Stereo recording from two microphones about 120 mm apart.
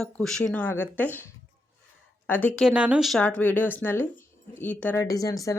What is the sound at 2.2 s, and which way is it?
Speech, 15° left (ahead or behind).